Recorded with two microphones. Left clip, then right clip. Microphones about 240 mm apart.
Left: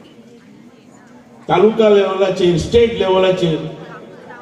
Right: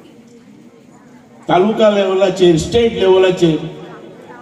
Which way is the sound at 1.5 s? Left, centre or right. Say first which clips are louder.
Even; right.